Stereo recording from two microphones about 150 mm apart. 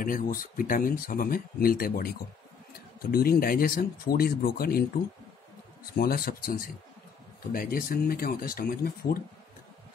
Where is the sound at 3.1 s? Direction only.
90° left.